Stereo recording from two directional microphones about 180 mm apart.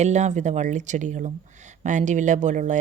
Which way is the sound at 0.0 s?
40° right (ahead or behind).